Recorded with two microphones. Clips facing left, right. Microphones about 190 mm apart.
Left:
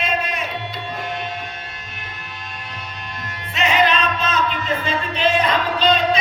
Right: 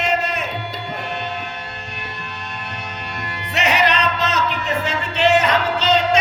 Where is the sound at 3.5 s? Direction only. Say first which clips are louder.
Even; 75° right (ahead or behind).